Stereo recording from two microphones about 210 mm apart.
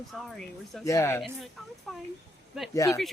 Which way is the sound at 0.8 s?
15° left (ahead or behind).